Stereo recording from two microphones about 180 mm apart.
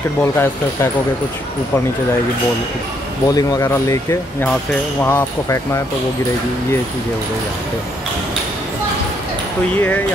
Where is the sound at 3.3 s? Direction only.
15° left (ahead or behind).